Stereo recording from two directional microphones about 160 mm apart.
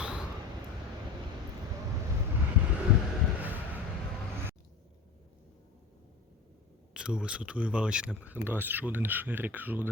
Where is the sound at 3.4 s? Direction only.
10° right (ahead or behind).